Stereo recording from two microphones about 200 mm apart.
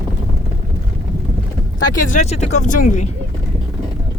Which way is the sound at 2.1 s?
35° left (ahead or behind).